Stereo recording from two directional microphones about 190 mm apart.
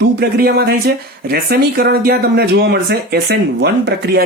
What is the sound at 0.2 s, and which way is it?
Speech, 55° right (ahead or behind).